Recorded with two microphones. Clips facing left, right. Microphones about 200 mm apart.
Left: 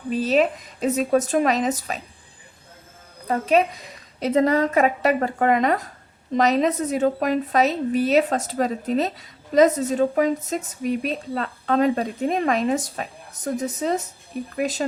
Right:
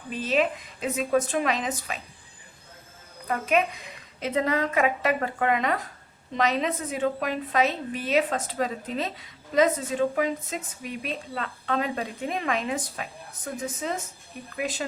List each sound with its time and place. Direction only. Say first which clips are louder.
0.1 s a woman's voice: left 5 dB; 40° left (ahead or behind)
3.2 s a woman's voice: left 5 dB; 35° left (ahead or behind)